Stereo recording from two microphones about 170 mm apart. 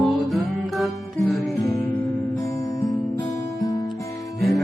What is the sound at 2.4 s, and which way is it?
Music, 20° left (ahead or behind).